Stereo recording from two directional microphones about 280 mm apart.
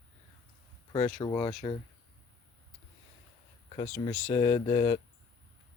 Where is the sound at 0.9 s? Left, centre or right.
Centre.